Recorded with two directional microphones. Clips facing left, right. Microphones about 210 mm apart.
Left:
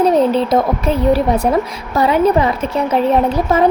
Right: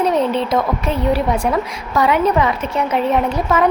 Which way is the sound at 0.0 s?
35° left (ahead or behind).